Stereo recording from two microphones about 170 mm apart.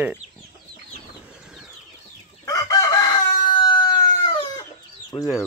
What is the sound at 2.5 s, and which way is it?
Chicken, 20° left (ahead or behind).